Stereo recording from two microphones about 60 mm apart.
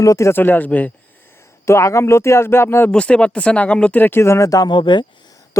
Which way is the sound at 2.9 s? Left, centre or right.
Centre.